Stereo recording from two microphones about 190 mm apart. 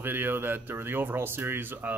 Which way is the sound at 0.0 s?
10° right (ahead or behind).